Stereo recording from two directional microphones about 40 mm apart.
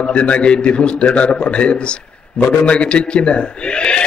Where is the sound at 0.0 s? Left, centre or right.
Left.